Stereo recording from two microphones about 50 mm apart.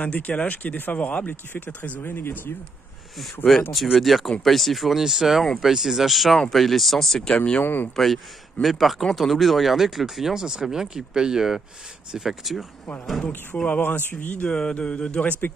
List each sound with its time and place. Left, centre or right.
0.0 s speech: left
1.2 s speech: left
2.0 s speech: left
3.7 s speech: centre
7.6 s speech: left
7.9 s speech: centre
13.7 s speech: left
14.5 s speech: left